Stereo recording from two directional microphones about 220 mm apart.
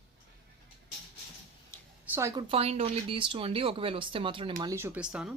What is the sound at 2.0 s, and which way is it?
Speech, 10° right (ahead or behind).